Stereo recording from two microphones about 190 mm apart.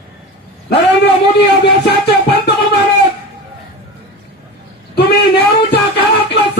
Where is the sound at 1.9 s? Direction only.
55° left (ahead or behind).